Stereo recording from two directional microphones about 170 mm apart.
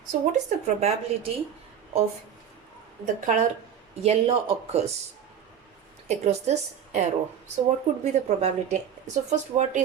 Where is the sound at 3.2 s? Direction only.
50° right (ahead or behind).